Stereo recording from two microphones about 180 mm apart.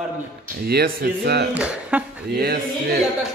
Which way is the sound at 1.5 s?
5° right (ahead or behind).